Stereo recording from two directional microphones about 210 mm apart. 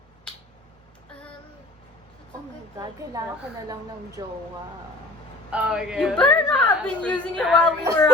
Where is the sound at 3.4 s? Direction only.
15° right (ahead or behind).